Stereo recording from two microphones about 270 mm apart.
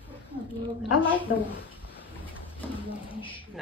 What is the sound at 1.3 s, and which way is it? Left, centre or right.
Speech, left.